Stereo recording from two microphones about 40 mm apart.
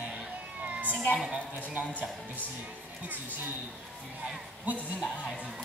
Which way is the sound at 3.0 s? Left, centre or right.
Right.